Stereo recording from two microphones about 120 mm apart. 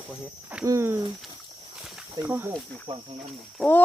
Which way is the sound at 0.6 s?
25° right (ahead or behind).